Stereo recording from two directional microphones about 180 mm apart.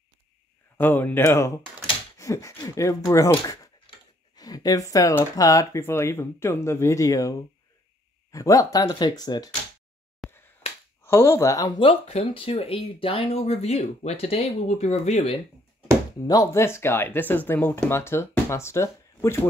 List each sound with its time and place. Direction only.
0.7 s speech: 10° left (ahead or behind)
3.3 s a sound: 25° left (ahead or behind)
4.4 s speech: 20° left (ahead or behind)
10.2 s finger snapping: centre (ahead or behind)
10.6 s finger snapping: 15° left (ahead or behind)
11.0 s speech: 15° left (ahead or behind); by 15.3 s 35° left (ahead or behind)
16.3 s speech: 15° left (ahead or behind)